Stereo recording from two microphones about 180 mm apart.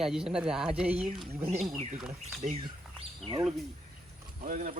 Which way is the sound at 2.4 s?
45° right (ahead or behind).